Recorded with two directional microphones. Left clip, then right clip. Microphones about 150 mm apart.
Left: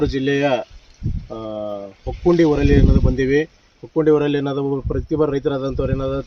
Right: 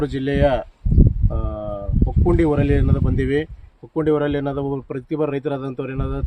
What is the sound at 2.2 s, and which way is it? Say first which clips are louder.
Speech: left 4 dB; 10° right (ahead or behind).